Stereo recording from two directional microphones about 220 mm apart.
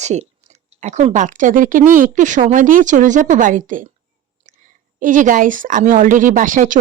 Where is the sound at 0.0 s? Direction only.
30° right (ahead or behind).